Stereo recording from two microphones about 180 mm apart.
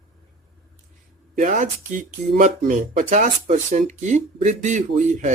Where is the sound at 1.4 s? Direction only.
45° right (ahead or behind).